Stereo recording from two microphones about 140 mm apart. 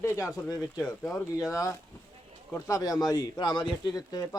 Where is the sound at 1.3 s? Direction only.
25° left (ahead or behind).